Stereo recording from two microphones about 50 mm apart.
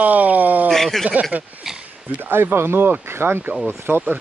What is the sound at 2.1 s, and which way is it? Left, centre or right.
Speech, right.